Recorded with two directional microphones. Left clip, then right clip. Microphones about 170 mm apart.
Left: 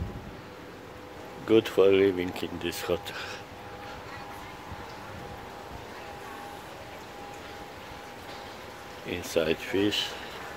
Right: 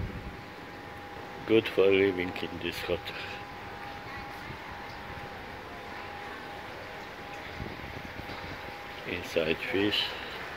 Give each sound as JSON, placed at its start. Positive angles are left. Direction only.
{"t": 1.5, "sound": "speech", "side_deg": 20}
{"t": 9.1, "sound": "speech", "side_deg": 25}